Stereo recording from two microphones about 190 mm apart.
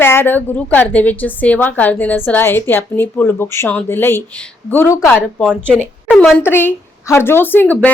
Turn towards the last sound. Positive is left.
turn(degrees=10)  # may be behind; listen again after turning